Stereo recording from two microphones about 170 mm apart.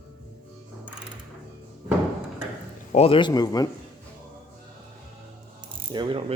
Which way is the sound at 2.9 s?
35° left (ahead or behind).